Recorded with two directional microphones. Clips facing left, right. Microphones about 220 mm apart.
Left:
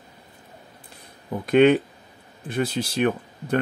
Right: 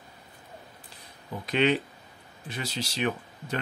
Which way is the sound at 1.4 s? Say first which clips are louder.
Left 9 dB; 50° left (ahead or behind).